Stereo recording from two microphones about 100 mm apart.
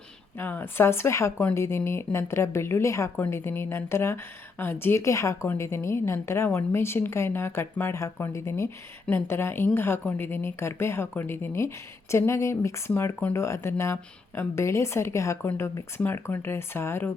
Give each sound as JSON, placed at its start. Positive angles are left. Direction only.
{"t": 0.3, "sound": "speech", "side_deg": 20}